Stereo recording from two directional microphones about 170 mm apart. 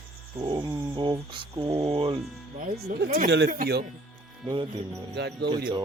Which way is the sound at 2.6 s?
70° right (ahead or behind).